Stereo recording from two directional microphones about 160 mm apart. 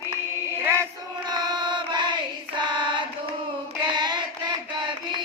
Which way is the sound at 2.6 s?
30° right (ahead or behind).